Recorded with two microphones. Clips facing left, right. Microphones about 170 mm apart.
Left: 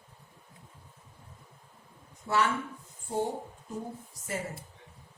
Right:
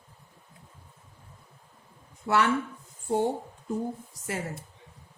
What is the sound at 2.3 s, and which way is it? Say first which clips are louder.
Speech: right 4 dB; 75° right (ahead or behind).